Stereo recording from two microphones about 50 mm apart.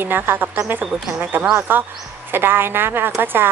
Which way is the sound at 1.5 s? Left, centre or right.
Right.